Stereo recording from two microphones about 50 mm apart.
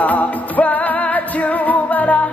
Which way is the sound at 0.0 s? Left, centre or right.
Left.